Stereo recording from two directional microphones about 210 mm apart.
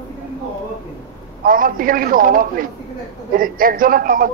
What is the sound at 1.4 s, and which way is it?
Speech, 40° right (ahead or behind).